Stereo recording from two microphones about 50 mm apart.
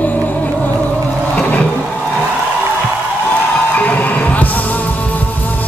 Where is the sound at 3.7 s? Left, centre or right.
Left.